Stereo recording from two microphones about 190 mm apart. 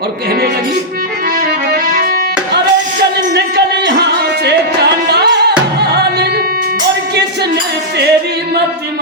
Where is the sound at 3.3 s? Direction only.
60° right (ahead or behind).